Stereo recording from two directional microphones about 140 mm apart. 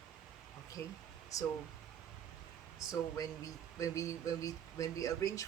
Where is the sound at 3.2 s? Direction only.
25° left (ahead or behind).